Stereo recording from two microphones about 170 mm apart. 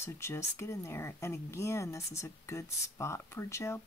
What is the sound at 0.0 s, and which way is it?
Speech, 15° left (ahead or behind).